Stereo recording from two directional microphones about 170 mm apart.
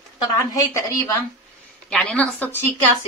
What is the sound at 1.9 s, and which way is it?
Speech, 5° left (ahead or behind).